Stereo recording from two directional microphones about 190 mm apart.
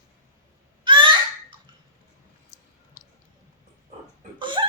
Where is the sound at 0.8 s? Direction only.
25° right (ahead or behind).